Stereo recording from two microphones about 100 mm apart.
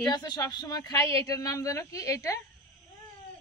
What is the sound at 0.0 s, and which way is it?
A woman's voice, 45° left (ahead or behind).